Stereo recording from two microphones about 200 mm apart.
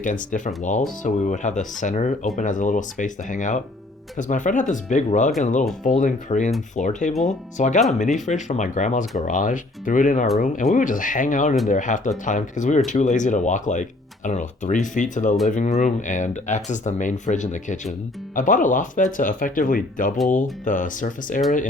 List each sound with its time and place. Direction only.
0.0 s speech: 40° left (ahead or behind)